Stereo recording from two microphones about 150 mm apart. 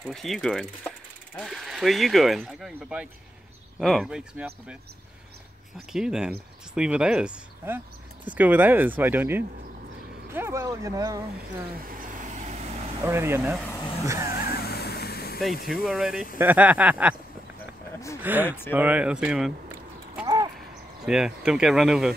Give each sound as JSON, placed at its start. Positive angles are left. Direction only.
{"t": 0.0, "sound": "mechanisms", "side_deg": 0}
{"t": 3.8, "sound": "speech", "side_deg": 0}
{"t": 5.9, "sound": "speech", "side_deg": -5}
{"t": 11.3, "sound": "vehicle", "side_deg": -70}
{"t": 13.0, "sound": "speech", "side_deg": -15}
{"t": 14.4, "sound": "vehicle", "side_deg": 90}
{"t": 15.7, "sound": "speech", "side_deg": 0}
{"t": 18.2, "sound": "speech", "side_deg": -10}
{"t": 21.0, "sound": "speech", "side_deg": -5}